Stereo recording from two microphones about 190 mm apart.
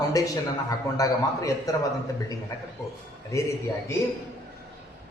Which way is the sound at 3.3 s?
15° left (ahead or behind).